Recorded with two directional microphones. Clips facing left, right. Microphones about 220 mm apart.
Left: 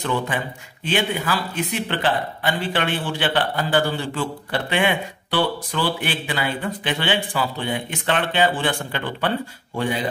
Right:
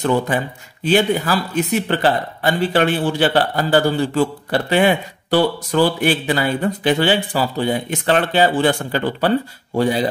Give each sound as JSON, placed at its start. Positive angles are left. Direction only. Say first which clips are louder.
{"t": 0.0, "sound": "a man's voice", "louder": "right 6 dB", "side_deg": -40}